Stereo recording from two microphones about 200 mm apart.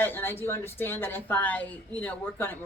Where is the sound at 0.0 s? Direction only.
10° left (ahead or behind).